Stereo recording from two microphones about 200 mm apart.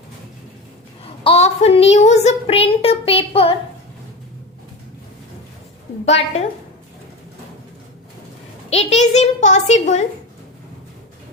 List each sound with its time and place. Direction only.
1.2 s child singing: 30° left (ahead or behind)
6.1 s child singing: 30° left (ahead or behind)
8.7 s child singing: 35° left (ahead or behind)